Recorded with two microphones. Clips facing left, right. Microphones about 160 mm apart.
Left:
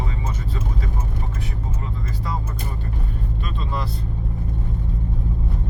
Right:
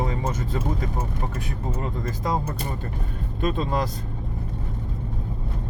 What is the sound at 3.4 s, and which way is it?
Speech, 45° right (ahead or behind).